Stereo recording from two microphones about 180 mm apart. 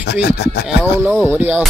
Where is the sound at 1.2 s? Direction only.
10° right (ahead or behind).